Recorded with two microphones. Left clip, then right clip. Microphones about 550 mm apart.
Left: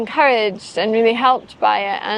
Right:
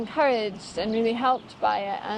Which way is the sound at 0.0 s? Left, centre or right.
Left.